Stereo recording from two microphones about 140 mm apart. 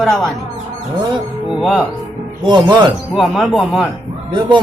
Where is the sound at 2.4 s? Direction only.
30° right (ahead or behind).